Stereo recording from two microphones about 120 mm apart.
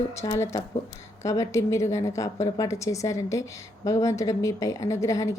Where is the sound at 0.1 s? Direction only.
25° left (ahead or behind).